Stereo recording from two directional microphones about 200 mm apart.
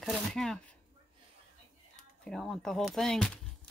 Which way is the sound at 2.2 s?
Centre (ahead or behind).